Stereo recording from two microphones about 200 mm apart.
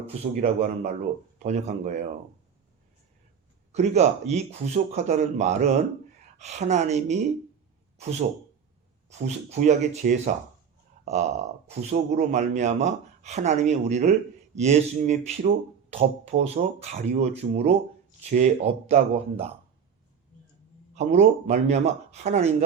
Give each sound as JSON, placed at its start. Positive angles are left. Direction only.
{"t": 0.0, "sound": "speech", "side_deg": -35}
{"t": 3.7, "sound": "speech", "side_deg": -35}
{"t": 9.2, "sound": "speech", "side_deg": -35}
{"t": 20.9, "sound": "speech", "side_deg": -35}